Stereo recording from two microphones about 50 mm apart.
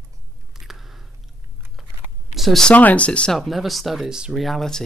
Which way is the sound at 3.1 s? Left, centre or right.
Left.